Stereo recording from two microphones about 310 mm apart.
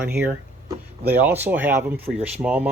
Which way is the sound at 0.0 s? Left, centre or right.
Centre.